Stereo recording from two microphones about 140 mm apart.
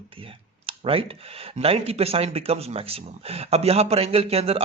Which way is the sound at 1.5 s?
45° right (ahead or behind).